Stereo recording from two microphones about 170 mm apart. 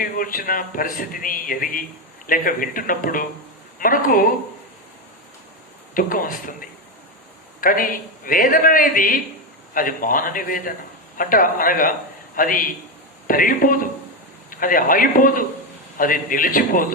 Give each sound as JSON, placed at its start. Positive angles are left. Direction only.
{"t": 0.0, "sound": "a man's voice", "side_deg": 55}
{"t": 5.9, "sound": "a man's voice", "side_deg": 55}